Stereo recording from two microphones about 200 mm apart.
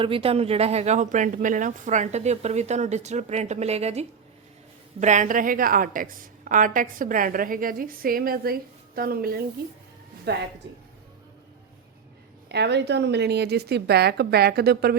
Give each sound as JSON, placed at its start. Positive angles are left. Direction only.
{"t": 0.0, "sound": "a woman's voice", "side_deg": -25}
{"t": 12.5, "sound": "a woman's voice", "side_deg": -55}